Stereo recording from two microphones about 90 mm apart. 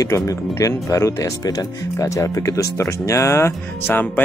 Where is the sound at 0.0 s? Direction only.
35° left (ahead or behind).